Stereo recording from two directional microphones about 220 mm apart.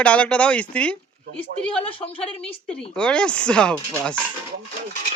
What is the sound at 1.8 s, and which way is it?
Speech, 25° left (ahead or behind).